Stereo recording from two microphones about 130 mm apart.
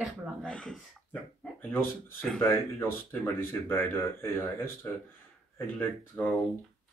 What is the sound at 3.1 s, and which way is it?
Speech, 15° left (ahead or behind).